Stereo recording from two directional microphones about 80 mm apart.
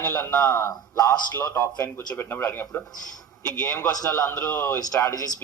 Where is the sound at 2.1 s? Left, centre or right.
Left.